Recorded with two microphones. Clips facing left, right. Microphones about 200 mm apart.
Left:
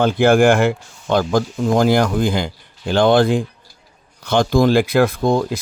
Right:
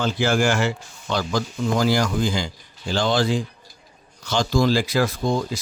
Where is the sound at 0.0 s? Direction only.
55° left (ahead or behind).